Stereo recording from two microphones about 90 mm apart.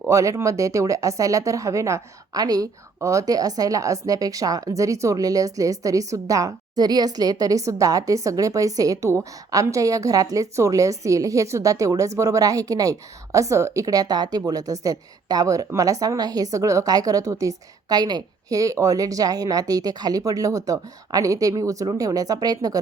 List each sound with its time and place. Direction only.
0.1 s speech: 35° right (ahead or behind)